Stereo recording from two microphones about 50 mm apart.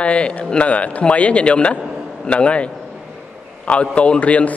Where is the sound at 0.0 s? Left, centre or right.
Left.